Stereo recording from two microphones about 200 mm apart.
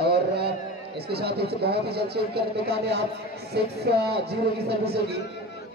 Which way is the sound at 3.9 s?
55° right (ahead or behind).